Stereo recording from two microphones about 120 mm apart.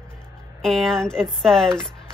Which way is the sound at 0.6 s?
5° left (ahead or behind).